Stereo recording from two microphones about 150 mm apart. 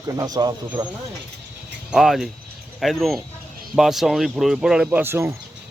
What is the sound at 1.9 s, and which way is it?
Speech, centre (ahead or behind).